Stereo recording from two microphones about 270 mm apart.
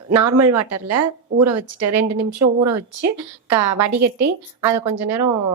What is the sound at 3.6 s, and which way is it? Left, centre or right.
Speech, right.